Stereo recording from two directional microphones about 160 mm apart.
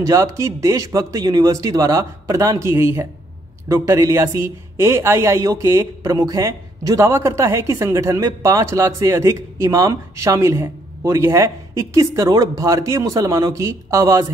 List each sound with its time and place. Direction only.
0.0 s speech: 20° right (ahead or behind)